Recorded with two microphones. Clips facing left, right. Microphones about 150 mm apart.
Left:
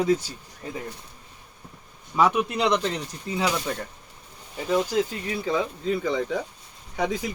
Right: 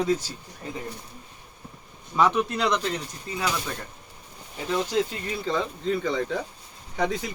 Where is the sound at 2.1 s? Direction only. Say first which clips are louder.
Left 1 dB; 10° left (ahead or behind).